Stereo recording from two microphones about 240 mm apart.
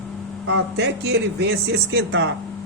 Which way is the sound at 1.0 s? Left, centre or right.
Right.